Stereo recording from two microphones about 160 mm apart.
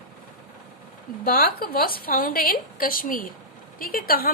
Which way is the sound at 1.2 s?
65° left (ahead or behind).